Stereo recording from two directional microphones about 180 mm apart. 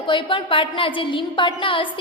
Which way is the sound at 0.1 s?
30° left (ahead or behind).